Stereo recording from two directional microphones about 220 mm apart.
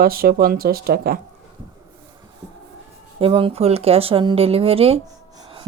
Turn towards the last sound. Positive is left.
turn(degrees=-25)  # may be behind; listen again after turning